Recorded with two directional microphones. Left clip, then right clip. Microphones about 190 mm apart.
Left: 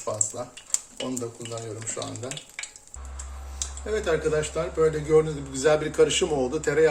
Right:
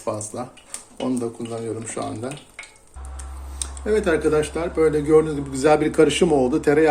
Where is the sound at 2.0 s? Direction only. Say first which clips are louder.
Right 5 dB; 45° right (ahead or behind).